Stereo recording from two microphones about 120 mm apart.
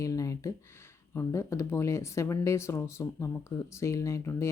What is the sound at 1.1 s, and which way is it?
Speech, 25° left (ahead or behind).